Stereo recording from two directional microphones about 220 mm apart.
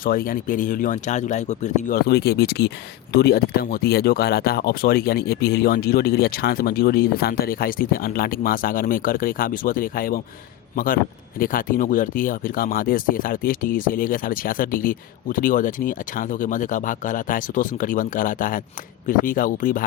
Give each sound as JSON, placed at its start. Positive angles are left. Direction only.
{"t": 0.0, "sound": "speech", "side_deg": 40}